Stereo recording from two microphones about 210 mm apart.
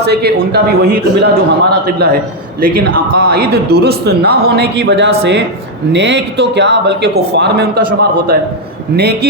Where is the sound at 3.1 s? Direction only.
50° right (ahead or behind).